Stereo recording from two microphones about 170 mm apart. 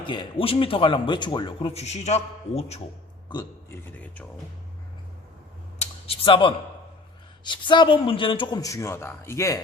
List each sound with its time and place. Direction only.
0.0 s speech: 30° left (ahead or behind)
3.7 s a man's voice: 10° left (ahead or behind)
5.8 s a sound: 30° left (ahead or behind)
7.4 s a man's voice: 25° left (ahead or behind)